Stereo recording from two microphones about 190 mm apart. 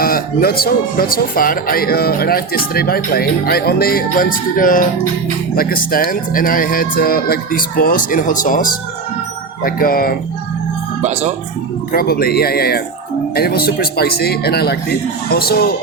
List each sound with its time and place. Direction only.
0.0 s speech: 50° left (ahead or behind)
11.0 s speech: 35° right (ahead or behind)
11.9 s speech: 50° left (ahead or behind)